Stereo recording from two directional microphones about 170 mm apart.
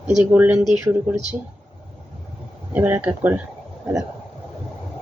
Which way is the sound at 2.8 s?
10° right (ahead or behind).